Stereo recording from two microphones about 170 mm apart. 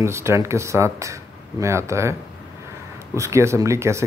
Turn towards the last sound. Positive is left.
turn(degrees=-15)  # may be behind; listen again after turning